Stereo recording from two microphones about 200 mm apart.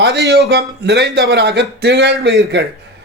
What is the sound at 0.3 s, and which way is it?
A man's voice, 60° right (ahead or behind).